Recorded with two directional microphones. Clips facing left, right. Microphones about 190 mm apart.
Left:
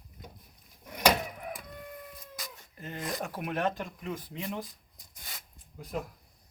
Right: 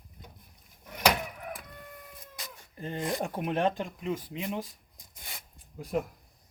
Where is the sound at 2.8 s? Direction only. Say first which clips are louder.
Right 4 dB; 30° right (ahead or behind).